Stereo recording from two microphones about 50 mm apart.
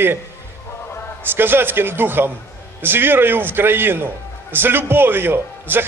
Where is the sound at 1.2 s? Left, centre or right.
Right.